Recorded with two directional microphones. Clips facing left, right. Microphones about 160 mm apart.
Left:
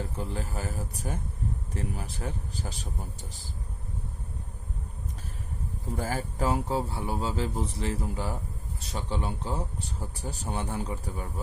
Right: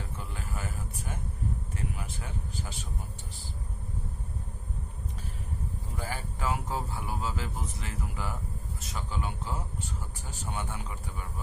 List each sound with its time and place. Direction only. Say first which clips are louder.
0.2 s speech: left 4 dB; 35° left (ahead or behind)
6.0 s speech: left 6 dB; 40° left (ahead or behind)